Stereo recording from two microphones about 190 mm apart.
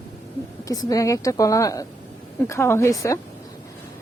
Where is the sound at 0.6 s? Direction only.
20° left (ahead or behind).